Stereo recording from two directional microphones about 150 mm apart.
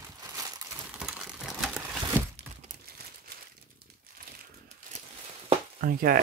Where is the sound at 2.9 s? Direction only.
90° right.